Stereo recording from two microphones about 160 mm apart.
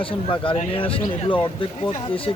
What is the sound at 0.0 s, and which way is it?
A man's voice, 35° left (ahead or behind).